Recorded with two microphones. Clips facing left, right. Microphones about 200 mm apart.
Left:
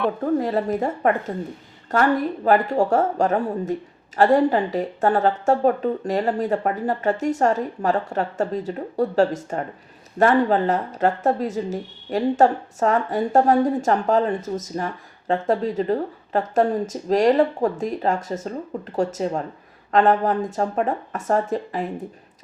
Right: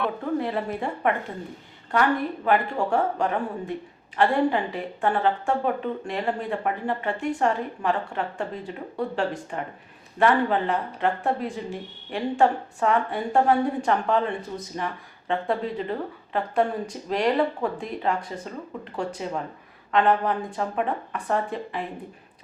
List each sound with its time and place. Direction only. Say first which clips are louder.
0.3 s speech: left 5 dB; 40° left (ahead or behind)